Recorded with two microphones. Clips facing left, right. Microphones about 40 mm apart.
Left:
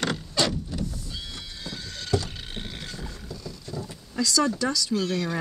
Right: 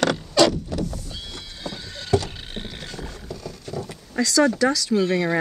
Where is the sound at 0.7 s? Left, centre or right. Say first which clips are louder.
Right 5 dB; right.